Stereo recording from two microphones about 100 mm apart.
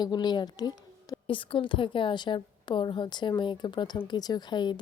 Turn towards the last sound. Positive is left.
turn(degrees=45)  # may be behind; listen again after turning